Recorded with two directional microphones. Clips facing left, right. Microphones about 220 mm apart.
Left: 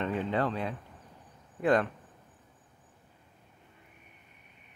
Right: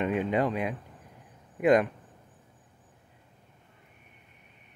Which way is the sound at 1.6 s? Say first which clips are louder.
Right 4 dB; 15° right (ahead or behind).